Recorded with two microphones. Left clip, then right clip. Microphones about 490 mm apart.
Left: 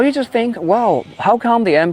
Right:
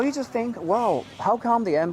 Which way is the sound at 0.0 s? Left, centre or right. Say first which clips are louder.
Left 10 dB; left.